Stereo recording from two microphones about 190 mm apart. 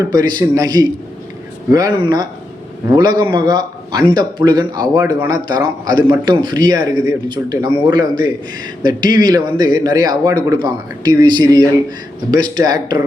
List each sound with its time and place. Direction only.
0.1 s speech: 20° right (ahead or behind)